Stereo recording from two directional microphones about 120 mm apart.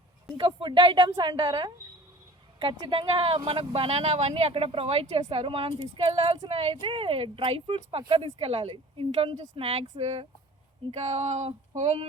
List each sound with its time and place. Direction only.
0.3 s a woman's voice: 45° right (ahead or behind); by 12.0 s 60° right (ahead or behind)